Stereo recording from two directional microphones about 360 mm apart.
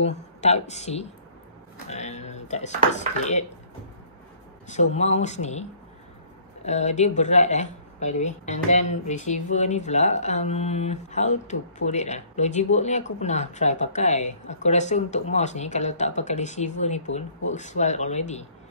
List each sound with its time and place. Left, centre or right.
0.0 s a woman's voice: centre
4.6 s speech: centre